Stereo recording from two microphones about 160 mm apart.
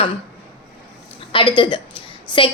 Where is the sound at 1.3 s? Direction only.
30° left (ahead or behind).